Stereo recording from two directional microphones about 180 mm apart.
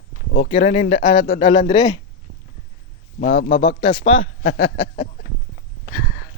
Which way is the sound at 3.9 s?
40° left (ahead or behind).